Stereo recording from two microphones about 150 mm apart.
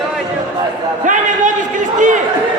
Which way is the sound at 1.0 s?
55° right (ahead or behind).